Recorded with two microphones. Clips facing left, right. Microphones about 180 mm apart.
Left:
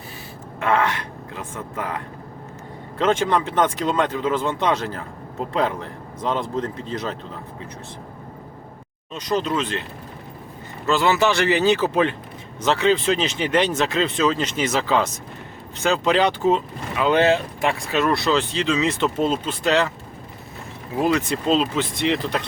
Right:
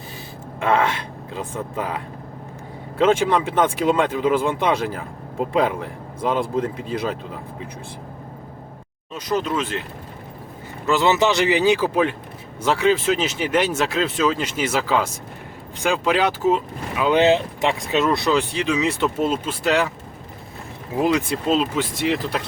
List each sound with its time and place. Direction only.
0.6 s speech: 15° right (ahead or behind)
3.0 s speech: 10° right (ahead or behind)
9.1 s speech: 5° right (ahead or behind)
10.8 s speech: 15° right (ahead or behind)
21.0 s speech: 10° right (ahead or behind)